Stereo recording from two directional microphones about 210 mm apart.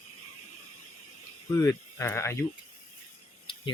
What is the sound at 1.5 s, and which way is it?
Speech, 10° left (ahead or behind).